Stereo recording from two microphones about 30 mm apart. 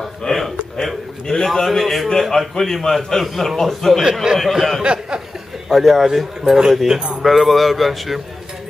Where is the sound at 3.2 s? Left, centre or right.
Centre.